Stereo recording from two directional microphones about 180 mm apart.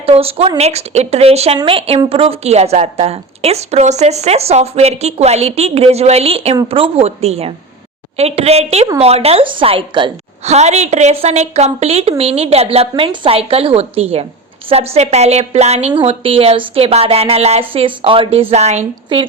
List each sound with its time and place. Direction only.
0.0 s a woman's voice: 35° right (ahead or behind)
19.1 s speech: 25° right (ahead or behind)